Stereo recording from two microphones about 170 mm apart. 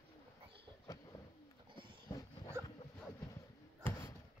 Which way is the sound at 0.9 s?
20° left (ahead or behind).